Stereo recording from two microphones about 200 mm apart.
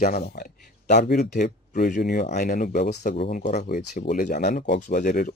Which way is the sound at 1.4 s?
40° left (ahead or behind).